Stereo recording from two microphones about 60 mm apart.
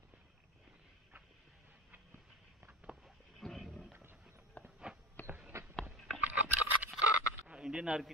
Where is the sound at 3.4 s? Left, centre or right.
Centre.